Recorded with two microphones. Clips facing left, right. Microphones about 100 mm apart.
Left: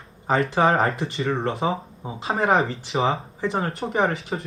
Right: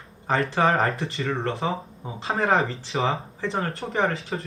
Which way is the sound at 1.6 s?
20° left (ahead or behind).